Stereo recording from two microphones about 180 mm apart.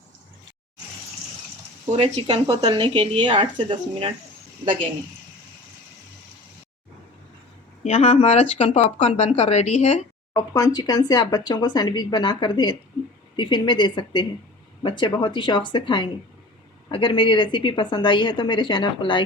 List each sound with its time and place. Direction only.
1.9 s speech: 35° right (ahead or behind)
2.5 s speech: 25° right (ahead or behind)
7.9 s speech: 40° left (ahead or behind)
10.3 s speech: 20° left (ahead or behind)